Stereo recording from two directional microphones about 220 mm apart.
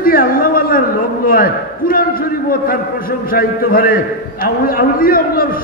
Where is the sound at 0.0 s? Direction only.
40° left (ahead or behind).